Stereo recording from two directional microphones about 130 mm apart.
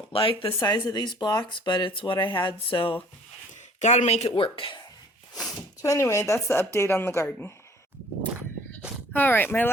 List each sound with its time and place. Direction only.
0.1 s speech: 45° left (ahead or behind)
3.8 s speech: 60° left (ahead or behind)
4.3 s speech: 40° left (ahead or behind)
5.8 s a woman's voice: 25° left (ahead or behind)
9.1 s speech: 15° left (ahead or behind)